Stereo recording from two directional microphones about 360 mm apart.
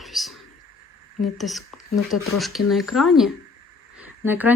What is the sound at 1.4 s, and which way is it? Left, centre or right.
A woman's voice, centre.